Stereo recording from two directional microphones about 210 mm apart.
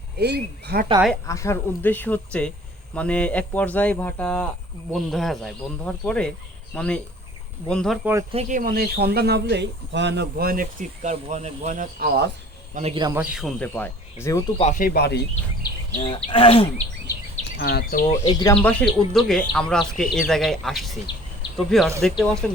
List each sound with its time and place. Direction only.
0.2 s speech: 50° right (ahead or behind)
1.3 s speech: 15° left (ahead or behind)
8.3 s speech: 35° right (ahead or behind); by 12.3 s 50° right (ahead or behind)
12.7 s a man's voice: 30° right (ahead or behind)
13.3 s speech: 5° left (ahead or behind)
14.6 s speech: 40° left (ahead or behind)
16.0 s speech: 25° left (ahead or behind)
17.6 s speech: 50° left (ahead or behind)
18.3 s speech: 20° left (ahead or behind)
18.6 s speech: 5° left (ahead or behind)